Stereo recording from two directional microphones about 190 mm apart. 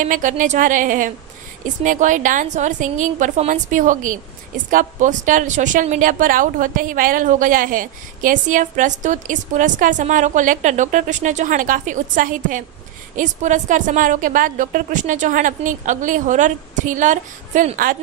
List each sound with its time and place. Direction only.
0.0 s a woman's voice: 40° right (ahead or behind)